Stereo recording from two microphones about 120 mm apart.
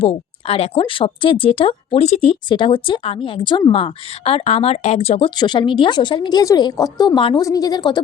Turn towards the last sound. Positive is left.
turn(degrees=35)  # may be behind; listen again after turning